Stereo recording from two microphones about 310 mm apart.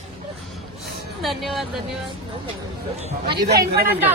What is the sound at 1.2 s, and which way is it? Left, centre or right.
Speech, centre.